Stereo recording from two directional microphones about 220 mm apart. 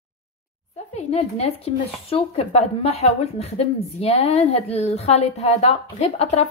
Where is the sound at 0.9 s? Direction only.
30° left (ahead or behind).